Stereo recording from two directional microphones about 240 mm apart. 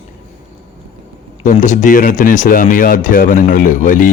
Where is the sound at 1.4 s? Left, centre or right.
Left.